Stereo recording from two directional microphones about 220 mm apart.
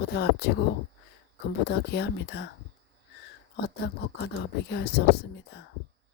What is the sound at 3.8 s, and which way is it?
Speech, 50° left (ahead or behind).